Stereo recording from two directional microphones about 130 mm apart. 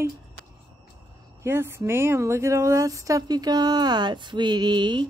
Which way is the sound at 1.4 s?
20° right (ahead or behind).